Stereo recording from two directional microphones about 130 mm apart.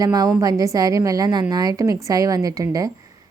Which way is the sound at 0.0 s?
30° right (ahead or behind).